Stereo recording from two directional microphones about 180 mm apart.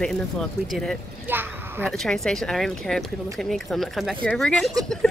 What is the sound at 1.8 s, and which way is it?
Speech, 5° left (ahead or behind).